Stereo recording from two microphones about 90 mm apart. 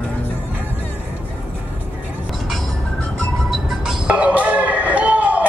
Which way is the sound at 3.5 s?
5° right (ahead or behind).